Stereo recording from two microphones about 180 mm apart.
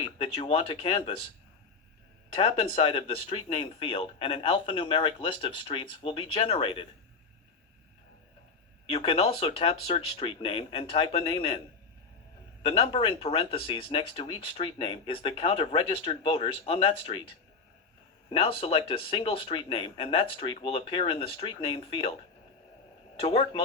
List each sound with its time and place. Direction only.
0.2 s speech: 35° left (ahead or behind)
2.3 s speech: 35° left (ahead or behind)
8.9 s speech: 35° left (ahead or behind)
12.6 s speech: 35° left (ahead or behind)
18.3 s speech: 30° left (ahead or behind)
23.2 s speech: 30° left (ahead or behind)